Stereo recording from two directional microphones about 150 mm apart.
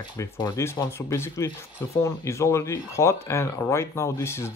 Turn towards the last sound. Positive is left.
turn(degrees=20)  # may be behind; listen again after turning